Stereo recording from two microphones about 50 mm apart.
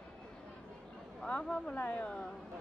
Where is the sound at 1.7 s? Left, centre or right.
Left.